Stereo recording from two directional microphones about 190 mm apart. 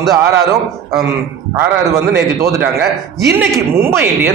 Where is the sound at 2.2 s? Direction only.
15° right (ahead or behind).